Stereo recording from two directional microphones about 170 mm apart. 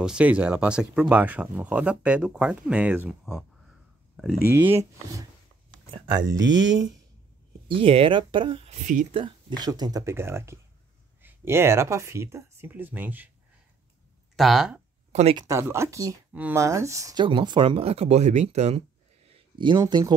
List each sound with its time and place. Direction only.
0.0 s speech: 5° right (ahead or behind)
4.5 s speech: 10° right (ahead or behind)
6.3 s speech: 90° right
7.6 s speech: 30° right (ahead or behind); by 13.3 s 10° right (ahead or behind)
14.3 s speech: centre (ahead or behind)
15.3 s speech: 20° right (ahead or behind); by 18.9 s 40° right (ahead or behind)
19.6 s speech: 25° right (ahead or behind)